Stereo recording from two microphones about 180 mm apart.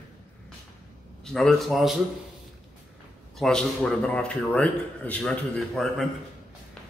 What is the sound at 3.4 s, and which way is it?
A man's voice, centre (ahead or behind).